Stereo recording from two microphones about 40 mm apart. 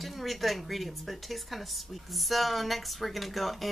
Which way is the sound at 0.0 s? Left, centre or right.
Centre.